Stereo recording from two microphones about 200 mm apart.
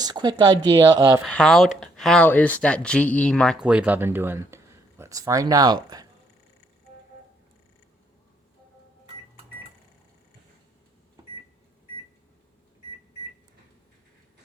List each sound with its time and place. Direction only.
0.0 s speech: 20° right (ahead or behind)
1.2 s speech: 5° left (ahead or behind); by 6.1 s 20° right (ahead or behind)